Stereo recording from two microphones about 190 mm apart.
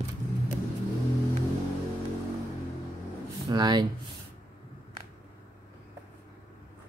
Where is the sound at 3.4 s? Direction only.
20° right (ahead or behind).